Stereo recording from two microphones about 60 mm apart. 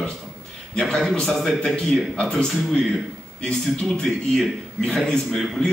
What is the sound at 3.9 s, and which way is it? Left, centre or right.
A man's voice, centre.